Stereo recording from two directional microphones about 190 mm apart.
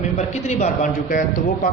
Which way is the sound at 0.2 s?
35° left (ahead or behind).